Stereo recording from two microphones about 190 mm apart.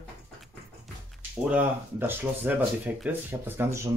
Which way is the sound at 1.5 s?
10° right (ahead or behind).